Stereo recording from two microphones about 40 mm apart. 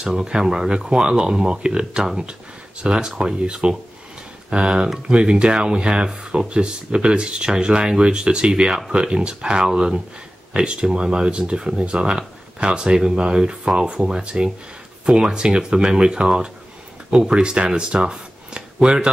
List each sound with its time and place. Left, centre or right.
0.1 s speech: centre